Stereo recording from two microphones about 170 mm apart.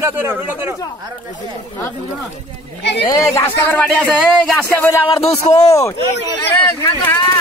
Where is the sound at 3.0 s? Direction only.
15° left (ahead or behind).